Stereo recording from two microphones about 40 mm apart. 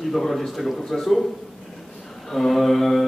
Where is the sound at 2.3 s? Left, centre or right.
Centre.